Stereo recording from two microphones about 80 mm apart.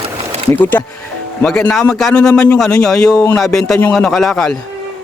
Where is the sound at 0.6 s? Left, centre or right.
Left.